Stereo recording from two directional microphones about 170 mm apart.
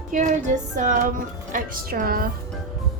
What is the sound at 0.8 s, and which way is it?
Speech, 50° right (ahead or behind).